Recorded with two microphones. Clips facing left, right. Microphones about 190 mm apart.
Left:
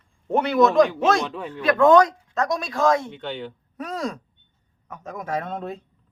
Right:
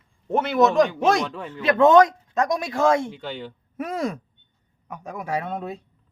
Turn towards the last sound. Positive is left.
turn(degrees=-10)  # may be behind; listen again after turning